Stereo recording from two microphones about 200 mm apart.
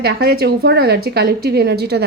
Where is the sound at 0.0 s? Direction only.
50° right (ahead or behind).